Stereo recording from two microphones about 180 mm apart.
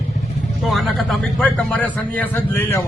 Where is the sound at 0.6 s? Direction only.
Centre (ahead or behind).